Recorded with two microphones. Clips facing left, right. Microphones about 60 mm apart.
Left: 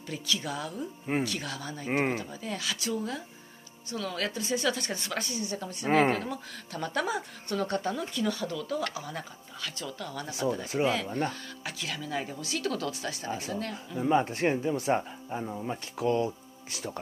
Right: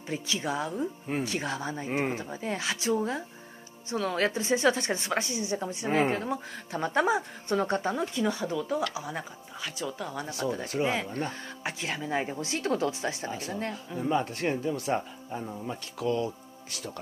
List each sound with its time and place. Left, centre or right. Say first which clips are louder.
0.1 s speech: right 2 dB; right
5.9 s a woman's voice: left 2 dB; left
6.1 s speech: right 3 dB; right
10.7 s speech: left 1 dB; centre
11.2 s speech: even; right
13.9 s speech: left 3 dB; centre
16.0 s speech: left 2 dB; left